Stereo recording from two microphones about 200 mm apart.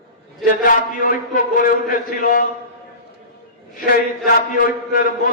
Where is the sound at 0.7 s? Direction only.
40° left (ahead or behind).